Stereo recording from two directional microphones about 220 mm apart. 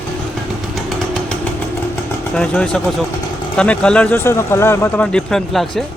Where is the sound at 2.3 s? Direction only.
5° left (ahead or behind).